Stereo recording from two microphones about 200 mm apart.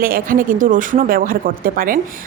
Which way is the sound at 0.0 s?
45° right (ahead or behind).